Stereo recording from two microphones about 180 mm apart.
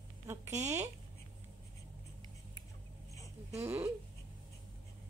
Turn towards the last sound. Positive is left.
turn(degrees=-15)  # may be behind; listen again after turning